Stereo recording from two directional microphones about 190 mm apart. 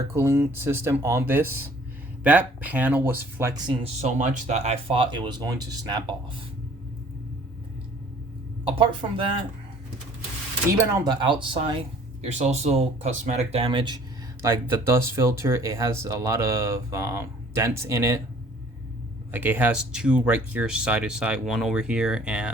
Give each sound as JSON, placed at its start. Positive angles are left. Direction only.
{"t": 0.1, "sound": "speech", "side_deg": -15}
{"t": 4.0, "sound": "speech", "side_deg": -40}
{"t": 8.6, "sound": "speech", "side_deg": -25}
{"t": 11.0, "sound": "speech", "side_deg": -25}
{"t": 14.4, "sound": "speech", "side_deg": -15}
{"t": 19.3, "sound": "speech", "side_deg": -10}